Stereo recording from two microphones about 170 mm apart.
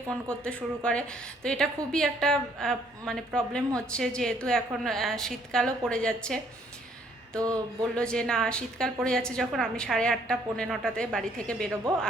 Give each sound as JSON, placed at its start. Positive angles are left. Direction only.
{"t": 0.3, "sound": "a woman's voice", "side_deg": 5}
{"t": 7.3, "sound": "a sound", "side_deg": -20}
{"t": 7.9, "sound": "a woman's voice", "side_deg": 5}